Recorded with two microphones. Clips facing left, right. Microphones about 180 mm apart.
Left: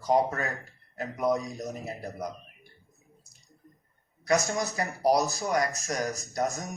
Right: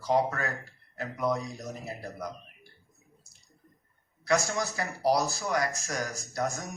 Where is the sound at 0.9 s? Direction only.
20° left (ahead or behind).